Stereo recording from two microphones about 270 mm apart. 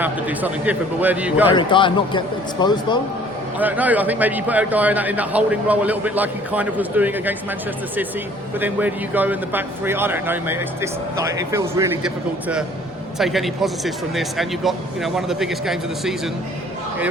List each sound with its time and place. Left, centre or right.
0.0 s a man's voice: centre
1.5 s a man's voice: centre
3.6 s a man's voice: centre
8.5 s a man's voice: centre